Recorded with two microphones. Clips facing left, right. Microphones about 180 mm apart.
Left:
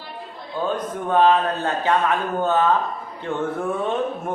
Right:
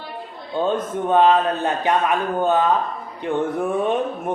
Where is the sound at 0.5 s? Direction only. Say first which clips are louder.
Right 3 dB; 25° right (ahead or behind).